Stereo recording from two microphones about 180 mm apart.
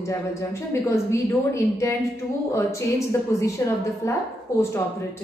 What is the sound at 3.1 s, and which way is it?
A woman's voice, 15° left (ahead or behind).